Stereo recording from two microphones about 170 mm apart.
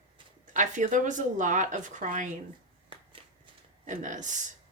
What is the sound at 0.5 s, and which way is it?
Speech, 45° right (ahead or behind).